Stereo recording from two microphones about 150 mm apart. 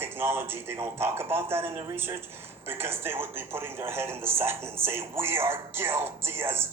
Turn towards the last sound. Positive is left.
turn(degrees=-15)  # may be behind; listen again after turning